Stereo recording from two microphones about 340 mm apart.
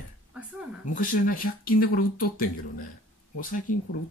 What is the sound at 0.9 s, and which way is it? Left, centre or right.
Speech, left.